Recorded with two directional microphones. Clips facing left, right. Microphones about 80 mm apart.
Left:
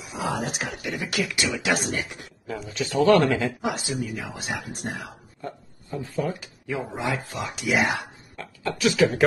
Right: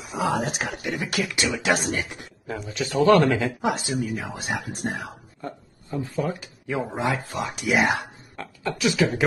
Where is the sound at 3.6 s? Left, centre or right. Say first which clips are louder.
Right 3 dB; right.